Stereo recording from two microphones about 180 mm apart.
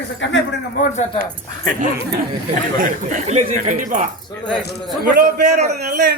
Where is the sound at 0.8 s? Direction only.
50° left (ahead or behind).